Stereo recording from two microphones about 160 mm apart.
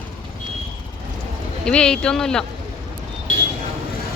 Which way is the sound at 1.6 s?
5° left (ahead or behind).